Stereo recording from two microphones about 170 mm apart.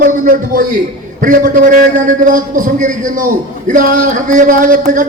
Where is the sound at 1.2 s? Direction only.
50° right (ahead or behind).